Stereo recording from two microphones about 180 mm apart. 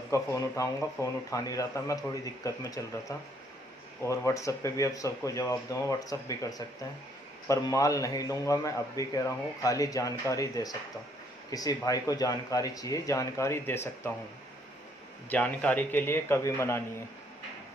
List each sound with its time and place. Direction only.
0.1 s a man's voice: 15° left (ahead or behind)
15.2 s speech: 10° left (ahead or behind)